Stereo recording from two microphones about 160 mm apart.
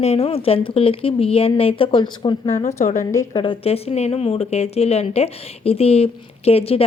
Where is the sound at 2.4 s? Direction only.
45° left (ahead or behind).